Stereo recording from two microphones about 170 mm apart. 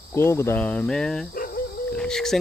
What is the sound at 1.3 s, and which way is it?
Cricket, 55° left (ahead or behind).